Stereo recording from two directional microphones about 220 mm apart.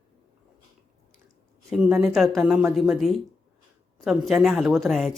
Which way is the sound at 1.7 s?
Centre (ahead or behind).